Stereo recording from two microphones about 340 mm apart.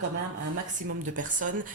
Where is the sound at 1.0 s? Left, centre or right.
Right.